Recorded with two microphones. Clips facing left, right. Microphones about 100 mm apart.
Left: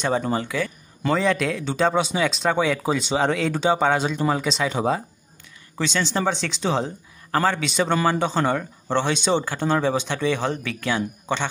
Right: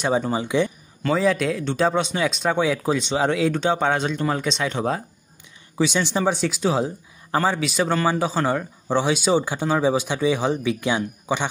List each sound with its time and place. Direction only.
0.0 s speech: 10° right (ahead or behind)
5.8 s speech: 15° right (ahead or behind)